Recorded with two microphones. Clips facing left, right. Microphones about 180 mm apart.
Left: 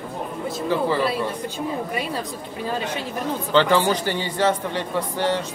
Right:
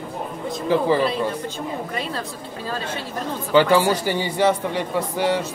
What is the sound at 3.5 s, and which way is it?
Speech, 10° right (ahead or behind).